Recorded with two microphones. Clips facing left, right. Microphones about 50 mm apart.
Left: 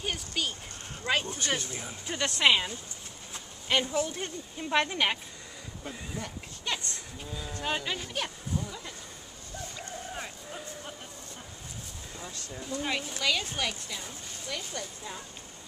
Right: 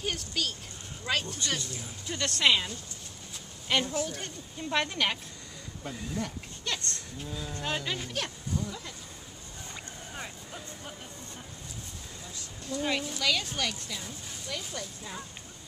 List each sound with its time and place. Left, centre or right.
0.0 s speech: centre
3.8 s speech: centre
10.1 s music: centre
12.8 s speech: centre